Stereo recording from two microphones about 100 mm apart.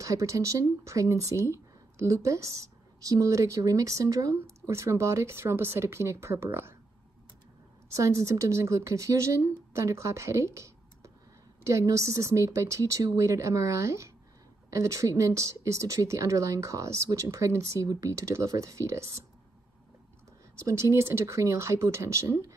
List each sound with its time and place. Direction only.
0.0 s speech: 35° right (ahead or behind)
7.9 s speech: 30° right (ahead or behind)
20.5 s speech: 30° right (ahead or behind)